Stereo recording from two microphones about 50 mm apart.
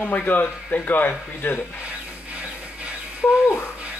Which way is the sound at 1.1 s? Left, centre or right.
Left.